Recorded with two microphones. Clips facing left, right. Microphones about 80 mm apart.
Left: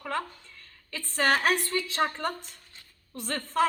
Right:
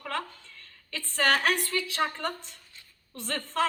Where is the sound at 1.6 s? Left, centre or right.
Centre.